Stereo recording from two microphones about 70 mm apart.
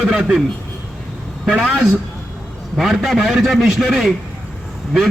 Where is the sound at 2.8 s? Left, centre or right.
Centre.